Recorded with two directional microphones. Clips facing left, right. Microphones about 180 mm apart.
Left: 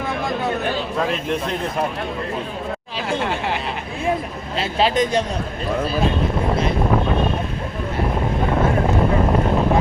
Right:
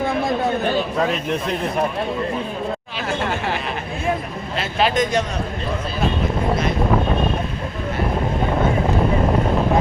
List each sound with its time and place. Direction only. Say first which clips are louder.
4.5 s speech: left 1 dB; 30° left (ahead or behind)